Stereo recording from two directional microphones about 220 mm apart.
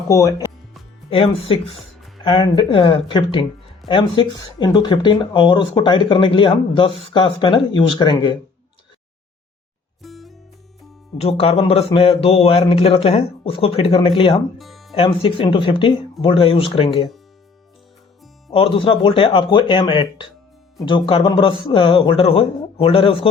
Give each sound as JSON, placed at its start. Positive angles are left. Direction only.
{"t": 0.1, "sound": "speech", "side_deg": 15}
{"t": 1.1, "sound": "speech", "side_deg": 25}
{"t": 10.0, "sound": "music", "side_deg": 0}
{"t": 11.2, "sound": "speech", "side_deg": 25}
{"t": 14.6, "sound": "music", "side_deg": 0}
{"t": 14.9, "sound": "speech", "side_deg": 25}
{"t": 18.5, "sound": "speech", "side_deg": 25}